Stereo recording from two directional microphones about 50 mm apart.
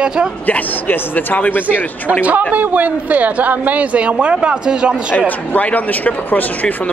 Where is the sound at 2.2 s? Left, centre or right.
Right.